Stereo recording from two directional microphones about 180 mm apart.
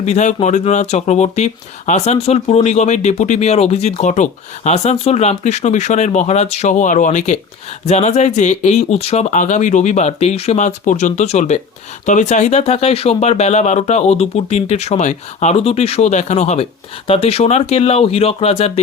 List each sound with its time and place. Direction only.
0.0 s speech: 40° left (ahead or behind)